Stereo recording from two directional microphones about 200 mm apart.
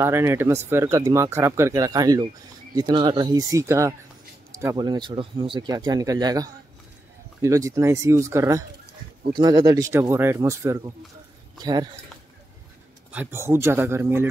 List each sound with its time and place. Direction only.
0.0 s speech: 15° right (ahead or behind)
13.1 s speech: 10° right (ahead or behind)